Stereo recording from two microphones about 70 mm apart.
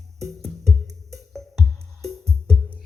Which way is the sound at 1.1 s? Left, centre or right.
Centre.